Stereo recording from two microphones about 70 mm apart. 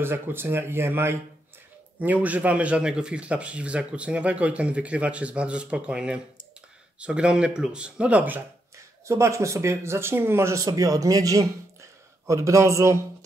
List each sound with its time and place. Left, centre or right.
0.0 s speech: right
2.0 s speech: right
9.0 s speech: right
10.7 s speech: right